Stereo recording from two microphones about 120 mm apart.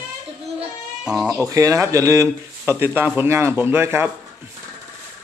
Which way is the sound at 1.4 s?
30° right (ahead or behind).